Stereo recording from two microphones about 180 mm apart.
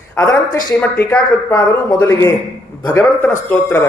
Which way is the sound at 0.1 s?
15° left (ahead or behind).